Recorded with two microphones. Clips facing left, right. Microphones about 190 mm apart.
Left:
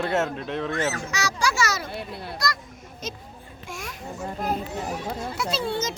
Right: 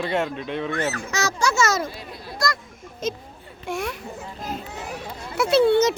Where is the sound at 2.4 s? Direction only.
50° right (ahead or behind).